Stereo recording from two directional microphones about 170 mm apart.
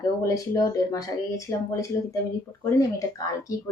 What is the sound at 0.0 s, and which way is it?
A woman's voice, 20° left (ahead or behind).